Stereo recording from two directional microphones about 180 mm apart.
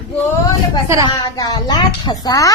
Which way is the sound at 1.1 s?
20° left (ahead or behind).